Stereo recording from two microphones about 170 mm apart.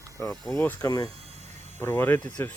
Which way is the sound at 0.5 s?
15° left (ahead or behind).